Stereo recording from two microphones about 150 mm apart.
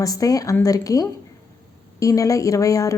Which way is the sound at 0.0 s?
25° left (ahead or behind).